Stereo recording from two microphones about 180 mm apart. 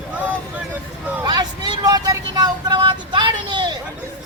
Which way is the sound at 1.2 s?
20° right (ahead or behind).